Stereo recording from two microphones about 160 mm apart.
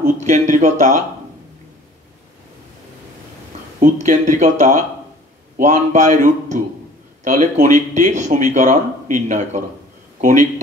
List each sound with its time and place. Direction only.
0.0 s speech: 50° right (ahead or behind)
3.8 s speech: 50° right (ahead or behind)